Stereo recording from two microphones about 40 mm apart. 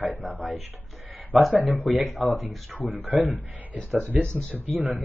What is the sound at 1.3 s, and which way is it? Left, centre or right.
Speech, right.